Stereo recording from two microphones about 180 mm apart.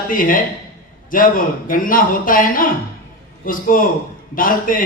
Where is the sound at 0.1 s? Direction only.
50° left (ahead or behind).